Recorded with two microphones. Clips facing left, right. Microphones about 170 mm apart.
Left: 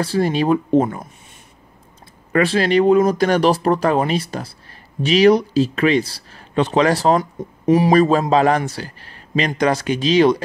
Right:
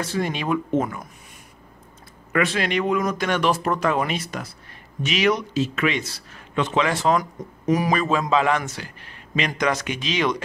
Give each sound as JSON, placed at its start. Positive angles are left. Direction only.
{"t": 0.0, "sound": "a man's voice", "side_deg": 35}
{"t": 2.3, "sound": "a man's voice", "side_deg": 35}